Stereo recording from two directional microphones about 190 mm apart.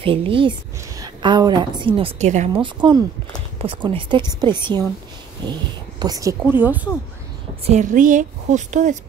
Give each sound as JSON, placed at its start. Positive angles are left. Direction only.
{"t": 0.0, "sound": "a woman's voice", "side_deg": -30}
{"t": 2.5, "sound": "a woman's voice", "side_deg": -25}
{"t": 7.6, "sound": "a woman's voice", "side_deg": -40}